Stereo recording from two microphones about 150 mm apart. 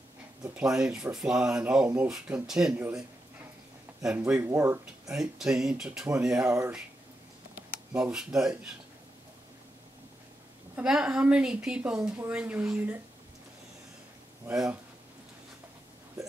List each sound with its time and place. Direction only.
0.6 s a woman's voice: 5° right (ahead or behind)
4.3 s speech: 15° right (ahead or behind)
5.1 s a woman's voice: 5° right (ahead or behind)
7.7 s speech: 5° right (ahead or behind)
10.8 s a woman's voice: 5° right (ahead or behind)
14.5 s speech: 5° right (ahead or behind)